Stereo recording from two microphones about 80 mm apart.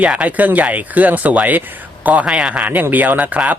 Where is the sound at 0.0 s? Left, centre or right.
Centre.